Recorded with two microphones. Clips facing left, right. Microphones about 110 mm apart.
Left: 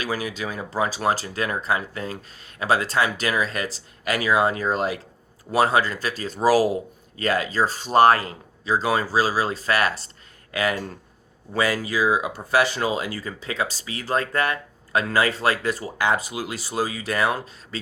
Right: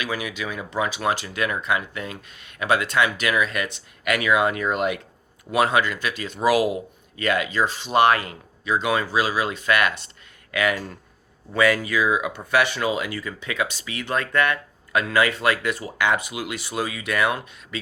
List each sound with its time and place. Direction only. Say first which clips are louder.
0.0 s speech: left 1 dB; 40° left (ahead or behind)